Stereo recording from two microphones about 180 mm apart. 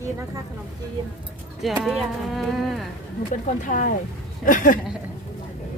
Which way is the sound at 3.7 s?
45° left (ahead or behind).